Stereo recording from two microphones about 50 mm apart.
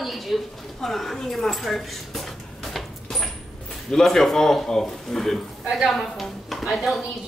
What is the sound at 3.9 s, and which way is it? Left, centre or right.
A man's voice, centre.